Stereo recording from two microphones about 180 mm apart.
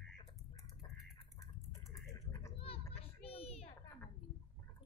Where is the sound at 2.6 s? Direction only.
30° left (ahead or behind).